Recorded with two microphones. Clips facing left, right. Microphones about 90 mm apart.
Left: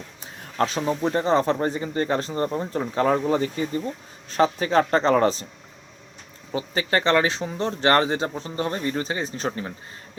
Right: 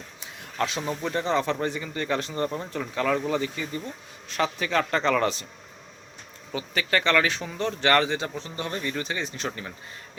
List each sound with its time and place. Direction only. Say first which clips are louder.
0.2 s a sound: left 4 dB; 40° left (ahead or behind)
0.8 s speech: left 5 dB; 30° left (ahead or behind)
6.5 s speech: left 3 dB; 30° left (ahead or behind)